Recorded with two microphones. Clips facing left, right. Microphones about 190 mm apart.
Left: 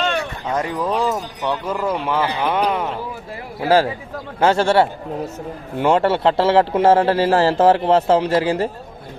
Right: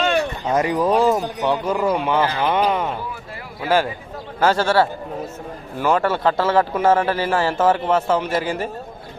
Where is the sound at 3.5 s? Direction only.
30° left (ahead or behind).